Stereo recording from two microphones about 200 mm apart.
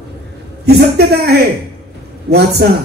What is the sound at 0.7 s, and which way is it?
A man's voice, 55° right (ahead or behind).